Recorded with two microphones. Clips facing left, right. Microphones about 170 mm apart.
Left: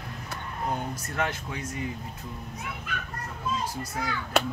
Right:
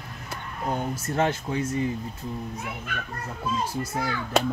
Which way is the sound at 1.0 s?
30° right (ahead or behind).